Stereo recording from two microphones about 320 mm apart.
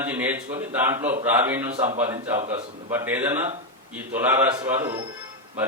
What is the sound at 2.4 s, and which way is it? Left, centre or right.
Speech, right.